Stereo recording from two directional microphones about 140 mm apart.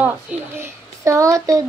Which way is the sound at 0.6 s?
20° right (ahead or behind).